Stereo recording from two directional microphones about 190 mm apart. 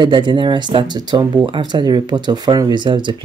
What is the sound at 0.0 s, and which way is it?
Speech, 25° right (ahead or behind).